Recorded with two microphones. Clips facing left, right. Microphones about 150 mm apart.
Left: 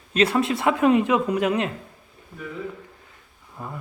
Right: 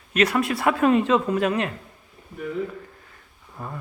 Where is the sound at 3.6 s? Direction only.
15° left (ahead or behind).